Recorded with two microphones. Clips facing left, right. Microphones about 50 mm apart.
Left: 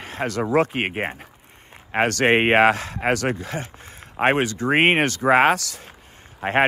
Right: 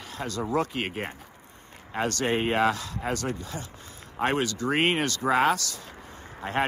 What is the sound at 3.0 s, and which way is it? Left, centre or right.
Speech, left.